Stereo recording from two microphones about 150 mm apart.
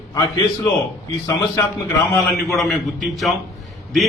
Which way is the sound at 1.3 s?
25° left (ahead or behind).